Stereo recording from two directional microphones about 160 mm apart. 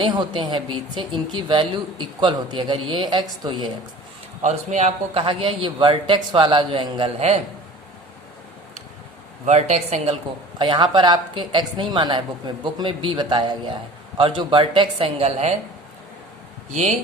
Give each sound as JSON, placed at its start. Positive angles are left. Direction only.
{"t": 0.0, "sound": "speech", "side_deg": -30}
{"t": 4.4, "sound": "a man's voice", "side_deg": -45}
{"t": 9.5, "sound": "a woman's voice", "side_deg": -45}
{"t": 10.6, "sound": "a man's voice", "side_deg": -30}